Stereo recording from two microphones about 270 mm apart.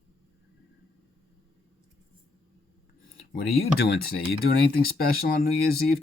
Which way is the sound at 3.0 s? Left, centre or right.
Left.